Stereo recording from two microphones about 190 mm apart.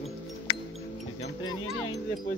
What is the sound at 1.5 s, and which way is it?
Speech, 90° left.